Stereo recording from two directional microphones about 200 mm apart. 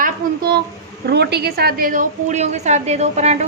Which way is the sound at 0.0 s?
50° right (ahead or behind).